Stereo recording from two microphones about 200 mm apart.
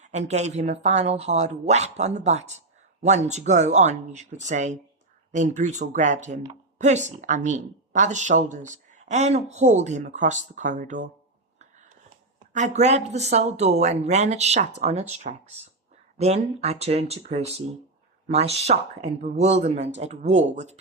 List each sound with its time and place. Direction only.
0.0 s a woman's voice: 35° right (ahead or behind)
12.5 s a woman's voice: 35° right (ahead or behind)